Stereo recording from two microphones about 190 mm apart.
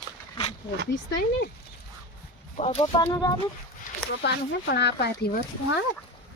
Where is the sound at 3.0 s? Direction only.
20° left (ahead or behind).